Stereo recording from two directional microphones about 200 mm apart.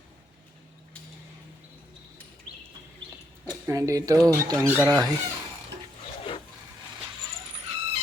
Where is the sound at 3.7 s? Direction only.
15° right (ahead or behind).